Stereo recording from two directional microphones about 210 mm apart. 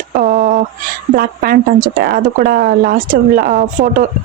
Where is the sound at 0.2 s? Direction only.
40° right (ahead or behind).